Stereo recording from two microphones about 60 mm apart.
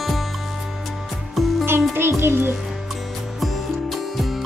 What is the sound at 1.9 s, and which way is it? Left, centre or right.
Speech, right.